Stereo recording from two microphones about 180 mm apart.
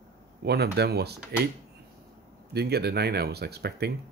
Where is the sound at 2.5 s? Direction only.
65° right (ahead or behind).